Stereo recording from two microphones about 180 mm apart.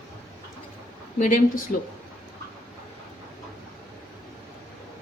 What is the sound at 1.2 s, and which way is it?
Speech, 50° left (ahead or behind).